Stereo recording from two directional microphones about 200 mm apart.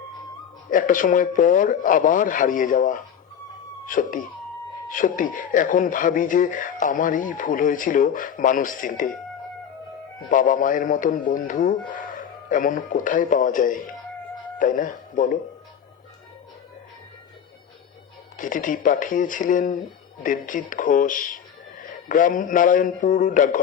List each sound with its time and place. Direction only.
0.7 s speech: 40° left (ahead or behind)
10.2 s speech: 40° left (ahead or behind)
18.3 s speech: 40° left (ahead or behind)